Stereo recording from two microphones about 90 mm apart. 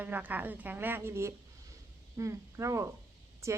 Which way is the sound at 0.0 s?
20° right (ahead or behind).